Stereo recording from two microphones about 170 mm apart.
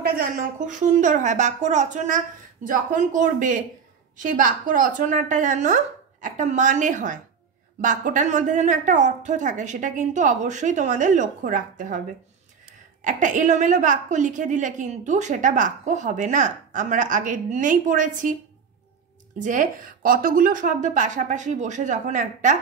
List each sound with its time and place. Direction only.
0.0 s a woman's voice: 60° right (ahead or behind)
13.0 s a woman's voice: 50° right (ahead or behind)
19.3 s a woman's voice: 50° right (ahead or behind)